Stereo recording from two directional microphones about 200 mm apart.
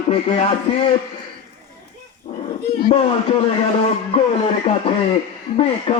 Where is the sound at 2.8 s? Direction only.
30° left (ahead or behind).